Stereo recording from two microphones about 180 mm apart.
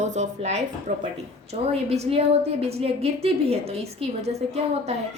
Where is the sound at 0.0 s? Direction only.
40° right (ahead or behind).